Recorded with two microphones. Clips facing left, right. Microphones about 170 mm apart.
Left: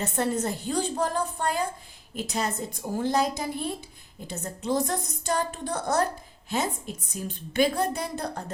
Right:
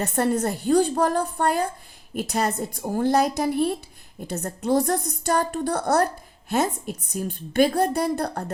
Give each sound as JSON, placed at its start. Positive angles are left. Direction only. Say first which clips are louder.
{"t": 0.0, "sound": "a woman's voice", "louder": "right 4 dB", "side_deg": -55}